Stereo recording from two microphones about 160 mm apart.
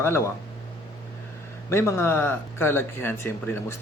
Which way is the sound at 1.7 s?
15° left (ahead or behind).